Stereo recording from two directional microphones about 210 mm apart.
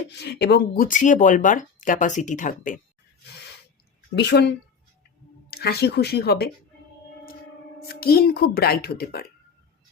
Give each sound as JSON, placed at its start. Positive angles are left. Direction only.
{"t": 0.1, "sound": "speech", "side_deg": 55}
{"t": 0.9, "sound": "speech", "side_deg": 35}
{"t": 4.1, "sound": "a woman's voice", "side_deg": 55}
{"t": 7.8, "sound": "speech", "side_deg": 45}